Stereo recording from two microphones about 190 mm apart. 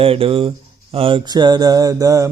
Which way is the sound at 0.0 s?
30° right (ahead or behind).